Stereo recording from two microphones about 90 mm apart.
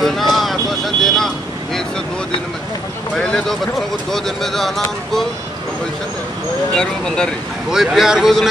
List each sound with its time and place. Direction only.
0.0 s vehicle: centre (ahead or behind)
3.2 s speech: 10° left (ahead or behind)
6.7 s speech: 10° left (ahead or behind)
7.7 s speech: 5° right (ahead or behind)